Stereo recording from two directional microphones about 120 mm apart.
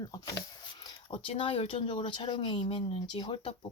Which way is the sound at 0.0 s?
30° left (ahead or behind).